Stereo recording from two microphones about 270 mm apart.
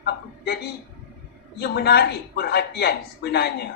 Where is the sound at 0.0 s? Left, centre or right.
Left.